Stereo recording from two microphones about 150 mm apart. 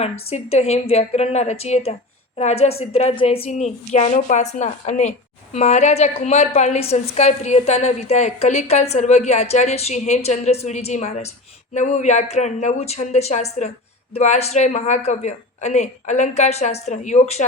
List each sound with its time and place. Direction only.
0.0 s a woman's voice: 45° left (ahead or behind)